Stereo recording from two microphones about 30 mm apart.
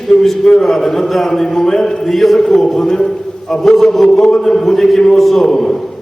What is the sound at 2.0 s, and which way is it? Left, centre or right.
Speech, centre.